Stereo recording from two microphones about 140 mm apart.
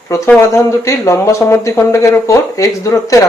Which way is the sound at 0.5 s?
20° left (ahead or behind).